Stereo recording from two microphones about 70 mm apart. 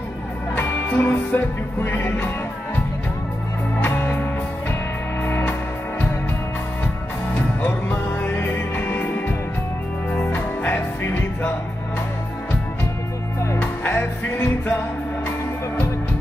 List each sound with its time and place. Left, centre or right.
0.6 s music: left
3.8 s music: left
7.3 s music: left
13.6 s music: left